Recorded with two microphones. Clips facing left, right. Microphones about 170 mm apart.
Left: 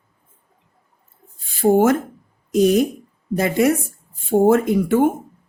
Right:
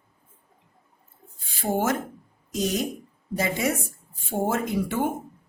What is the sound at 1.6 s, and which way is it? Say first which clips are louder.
A woman's voice: left 10 dB; 50° left (ahead or behind).